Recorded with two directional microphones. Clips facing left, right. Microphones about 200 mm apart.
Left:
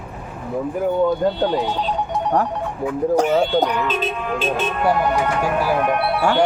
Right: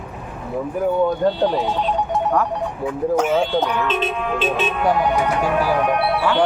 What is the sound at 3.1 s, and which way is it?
Speech, 35° left (ahead or behind).